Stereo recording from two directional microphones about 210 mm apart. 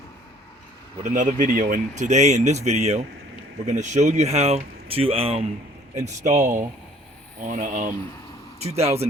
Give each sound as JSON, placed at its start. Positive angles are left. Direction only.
{"t": 1.0, "sound": "speech", "side_deg": -35}